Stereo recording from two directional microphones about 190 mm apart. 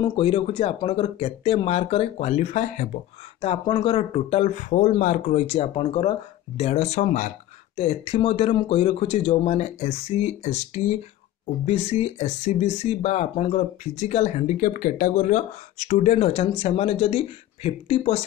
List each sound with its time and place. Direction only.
0.0 s speech: 25° left (ahead or behind)
3.3 s speech: 25° left (ahead or behind)